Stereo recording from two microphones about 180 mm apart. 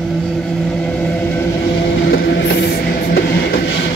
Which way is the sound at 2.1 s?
70° left (ahead or behind).